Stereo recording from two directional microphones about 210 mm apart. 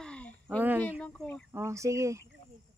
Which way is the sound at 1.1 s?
5° left (ahead or behind).